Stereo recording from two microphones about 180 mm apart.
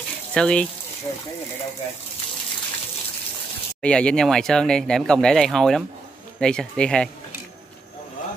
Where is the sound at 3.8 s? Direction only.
5° left (ahead or behind).